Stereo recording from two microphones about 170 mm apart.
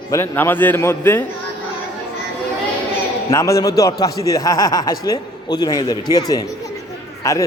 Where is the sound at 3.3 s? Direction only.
20° left (ahead or behind).